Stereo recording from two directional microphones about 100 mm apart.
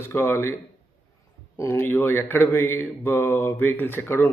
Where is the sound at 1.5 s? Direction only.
30° left (ahead or behind).